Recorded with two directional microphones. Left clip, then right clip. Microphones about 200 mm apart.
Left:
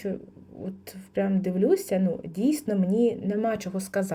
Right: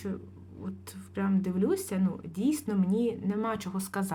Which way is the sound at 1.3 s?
5° left (ahead or behind).